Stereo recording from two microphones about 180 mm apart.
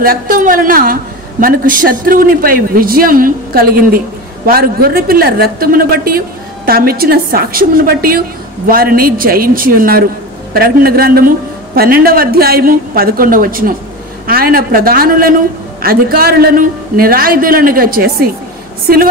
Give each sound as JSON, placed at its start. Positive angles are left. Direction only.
{"t": 0.0, "sound": "a man's voice", "side_deg": -50}